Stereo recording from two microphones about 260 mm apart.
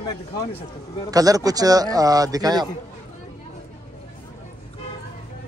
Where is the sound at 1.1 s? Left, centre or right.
Centre.